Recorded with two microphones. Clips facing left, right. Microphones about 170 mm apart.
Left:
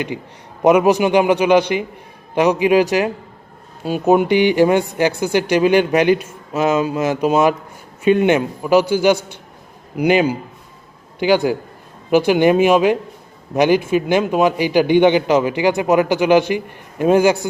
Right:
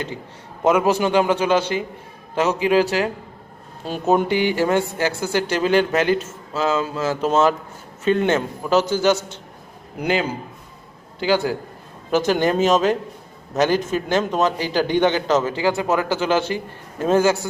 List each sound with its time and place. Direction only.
0.6 s a man's voice: 15° left (ahead or behind)